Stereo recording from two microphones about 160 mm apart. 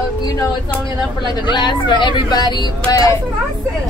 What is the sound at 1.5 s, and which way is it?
Speech, 30° left (ahead or behind).